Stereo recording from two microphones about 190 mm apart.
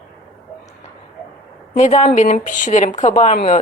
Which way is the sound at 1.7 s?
40° left (ahead or behind).